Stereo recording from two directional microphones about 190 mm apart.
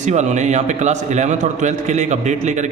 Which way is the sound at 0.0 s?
40° right (ahead or behind).